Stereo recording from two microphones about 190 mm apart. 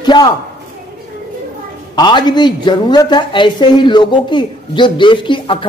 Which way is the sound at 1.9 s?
25° left (ahead or behind).